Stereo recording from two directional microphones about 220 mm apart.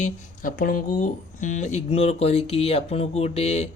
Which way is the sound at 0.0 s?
40° left (ahead or behind).